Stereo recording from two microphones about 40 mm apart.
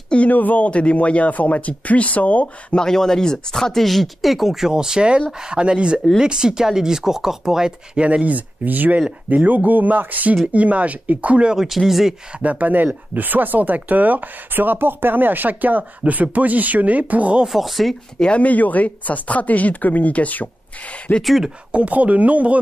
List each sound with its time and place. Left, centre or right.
0.3 s speech: left
0.7 s speech: left
2.7 s speech: centre
3.7 s speech: centre
4.6 s speech: centre
8.0 s speech: right
11.6 s speech: centre
12.4 s speech: right
17.5 s speech: centre
18.4 s speech: left
21.2 s speech: centre
21.7 s speech: right